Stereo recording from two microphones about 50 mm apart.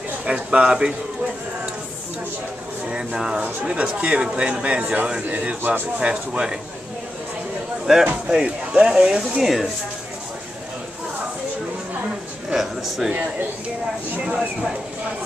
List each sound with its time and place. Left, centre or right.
0.2 s speech: right
2.9 s speech: centre
7.8 s speech: centre
8.3 s speech: right
9.3 s speech: centre
12.5 s speech: centre